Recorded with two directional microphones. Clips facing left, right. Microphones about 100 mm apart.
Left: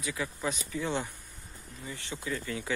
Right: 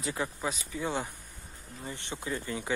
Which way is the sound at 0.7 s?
15° right (ahead or behind).